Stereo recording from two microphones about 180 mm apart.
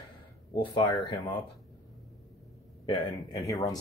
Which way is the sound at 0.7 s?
25° left (ahead or behind).